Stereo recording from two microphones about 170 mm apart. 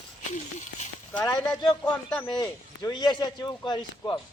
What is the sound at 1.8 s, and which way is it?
Speech, 5° left (ahead or behind).